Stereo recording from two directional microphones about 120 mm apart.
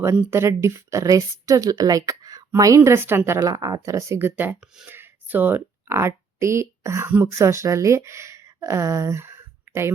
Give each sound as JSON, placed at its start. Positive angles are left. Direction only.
{"t": 0.3, "sound": "speech", "side_deg": -20}